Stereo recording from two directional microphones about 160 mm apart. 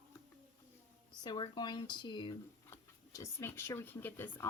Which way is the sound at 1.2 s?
30° left (ahead or behind).